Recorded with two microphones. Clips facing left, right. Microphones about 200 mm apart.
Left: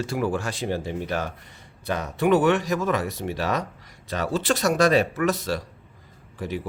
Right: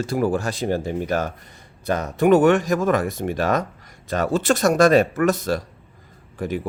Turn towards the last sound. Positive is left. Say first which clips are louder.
# right 5 dB
turn(degrees=-50)  # may be behind; listen again after turning